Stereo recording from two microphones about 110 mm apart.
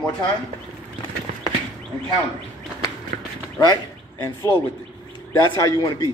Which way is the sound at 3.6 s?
35° left (ahead or behind).